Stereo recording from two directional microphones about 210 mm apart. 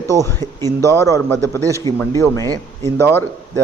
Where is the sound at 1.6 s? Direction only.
15° right (ahead or behind).